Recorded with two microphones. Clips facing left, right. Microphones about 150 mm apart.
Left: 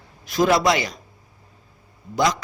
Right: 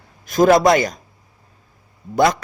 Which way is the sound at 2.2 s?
55° right (ahead or behind).